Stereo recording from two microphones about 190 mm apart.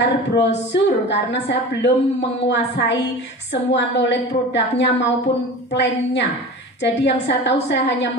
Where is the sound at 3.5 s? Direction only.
70° left (ahead or behind).